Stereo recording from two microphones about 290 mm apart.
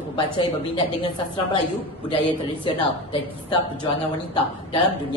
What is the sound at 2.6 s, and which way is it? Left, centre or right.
A man's voice, centre.